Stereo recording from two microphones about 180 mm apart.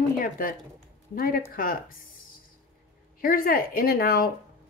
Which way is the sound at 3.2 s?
50° left (ahead or behind).